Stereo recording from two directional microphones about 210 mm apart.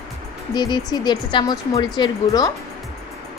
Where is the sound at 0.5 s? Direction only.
20° left (ahead or behind).